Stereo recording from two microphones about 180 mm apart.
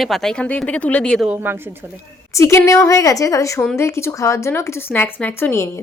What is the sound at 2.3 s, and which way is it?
Speech, 15° left (ahead or behind).